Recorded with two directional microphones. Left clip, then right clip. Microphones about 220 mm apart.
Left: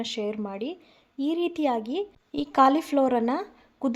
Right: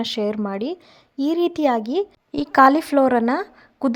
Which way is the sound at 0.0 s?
25° right (ahead or behind).